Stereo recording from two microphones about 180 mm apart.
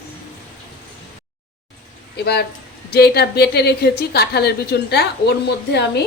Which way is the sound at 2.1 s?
65° left (ahead or behind).